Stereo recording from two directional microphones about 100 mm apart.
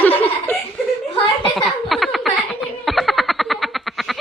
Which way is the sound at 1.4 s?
Centre (ahead or behind).